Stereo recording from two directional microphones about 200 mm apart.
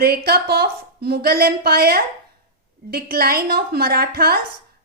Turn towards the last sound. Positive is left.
turn(degrees=-50)  # may be behind; listen again after turning